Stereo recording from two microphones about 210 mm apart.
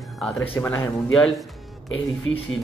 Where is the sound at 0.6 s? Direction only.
10° left (ahead or behind).